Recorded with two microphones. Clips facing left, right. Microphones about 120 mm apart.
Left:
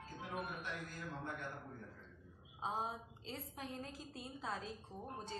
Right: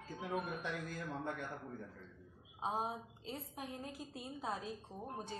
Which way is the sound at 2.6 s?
15° right (ahead or behind).